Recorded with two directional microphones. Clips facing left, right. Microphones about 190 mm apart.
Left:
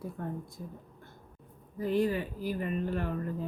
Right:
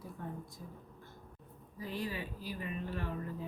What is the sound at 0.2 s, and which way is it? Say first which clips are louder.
Speech: left 5 dB; 50° left (ahead or behind).